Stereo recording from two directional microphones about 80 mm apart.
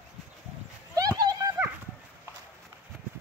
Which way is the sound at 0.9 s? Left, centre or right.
Right.